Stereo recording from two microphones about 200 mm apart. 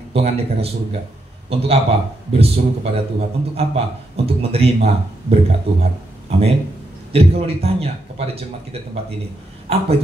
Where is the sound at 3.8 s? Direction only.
30° right (ahead or behind).